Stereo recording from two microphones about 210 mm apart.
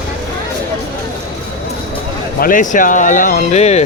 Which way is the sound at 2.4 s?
40° left (ahead or behind).